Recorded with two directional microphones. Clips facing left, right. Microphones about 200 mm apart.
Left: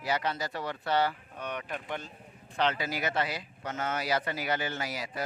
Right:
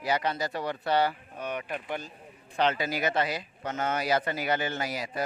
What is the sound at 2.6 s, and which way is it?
Speech, 20° right (ahead or behind).